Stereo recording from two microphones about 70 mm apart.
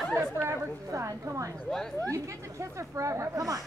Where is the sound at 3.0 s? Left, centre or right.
Right.